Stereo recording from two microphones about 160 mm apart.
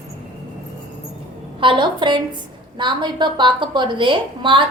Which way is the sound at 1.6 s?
30° right (ahead or behind).